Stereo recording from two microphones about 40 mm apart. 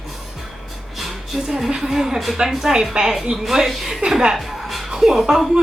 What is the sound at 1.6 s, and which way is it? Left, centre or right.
Speech, centre.